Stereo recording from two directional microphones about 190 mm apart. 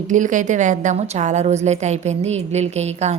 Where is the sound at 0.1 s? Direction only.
40° right (ahead or behind).